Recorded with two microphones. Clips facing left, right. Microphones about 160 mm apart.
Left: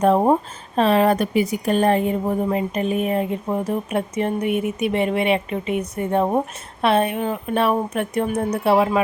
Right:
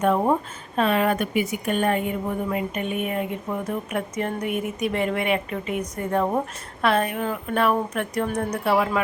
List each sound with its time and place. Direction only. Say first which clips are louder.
0.0 s a woman's voice: left 4 dB; 30° left (ahead or behind)